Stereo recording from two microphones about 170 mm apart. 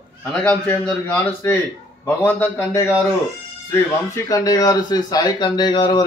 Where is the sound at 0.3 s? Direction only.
10° left (ahead or behind).